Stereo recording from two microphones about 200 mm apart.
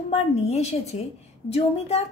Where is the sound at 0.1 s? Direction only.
35° left (ahead or behind).